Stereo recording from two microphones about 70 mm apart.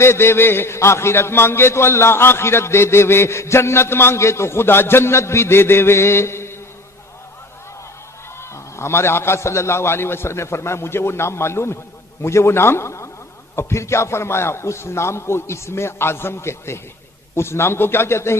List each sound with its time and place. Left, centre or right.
0.0 s a man's voice: left
8.4 s a man's voice: left